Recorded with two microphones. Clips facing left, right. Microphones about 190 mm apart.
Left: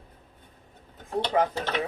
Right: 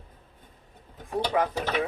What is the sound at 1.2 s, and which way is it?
Speech, 5° right (ahead or behind).